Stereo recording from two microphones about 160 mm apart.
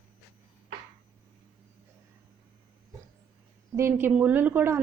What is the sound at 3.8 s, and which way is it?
Speech, 15° right (ahead or behind).